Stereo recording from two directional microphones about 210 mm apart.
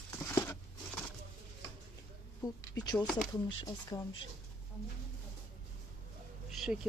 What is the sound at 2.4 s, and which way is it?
Speech, 10° left (ahead or behind).